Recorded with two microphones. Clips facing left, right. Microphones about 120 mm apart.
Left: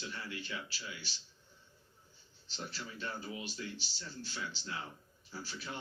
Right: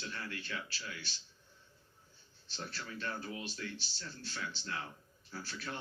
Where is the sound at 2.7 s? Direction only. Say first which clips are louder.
Right 2 dB; 15° left (ahead or behind).